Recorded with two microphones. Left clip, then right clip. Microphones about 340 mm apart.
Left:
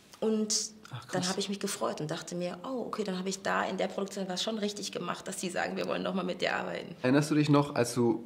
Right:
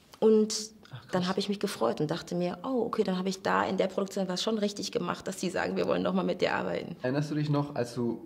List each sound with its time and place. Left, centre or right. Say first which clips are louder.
0.2 s speech: right 7 dB; right
7.0 s speech: left 9 dB; left